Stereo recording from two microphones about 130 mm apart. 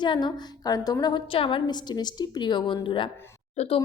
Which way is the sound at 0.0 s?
35° left (ahead or behind).